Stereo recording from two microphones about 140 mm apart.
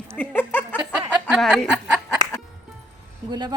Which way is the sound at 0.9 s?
10° right (ahead or behind).